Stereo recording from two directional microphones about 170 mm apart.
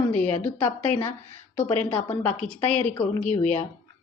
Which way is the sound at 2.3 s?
5° left (ahead or behind).